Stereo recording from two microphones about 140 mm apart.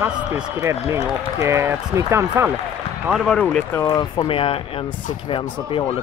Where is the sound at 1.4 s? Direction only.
20° right (ahead or behind).